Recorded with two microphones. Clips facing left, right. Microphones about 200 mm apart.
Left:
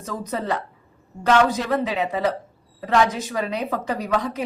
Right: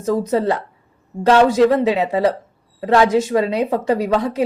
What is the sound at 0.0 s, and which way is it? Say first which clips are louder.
A woman's voice: right 11 dB; 30° right (ahead or behind).